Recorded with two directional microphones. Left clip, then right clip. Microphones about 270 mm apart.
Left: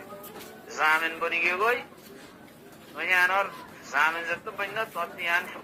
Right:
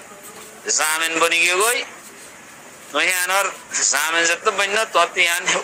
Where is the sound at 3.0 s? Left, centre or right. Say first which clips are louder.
Right 5 dB; right.